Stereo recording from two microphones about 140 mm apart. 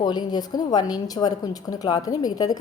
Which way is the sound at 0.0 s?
30° left (ahead or behind).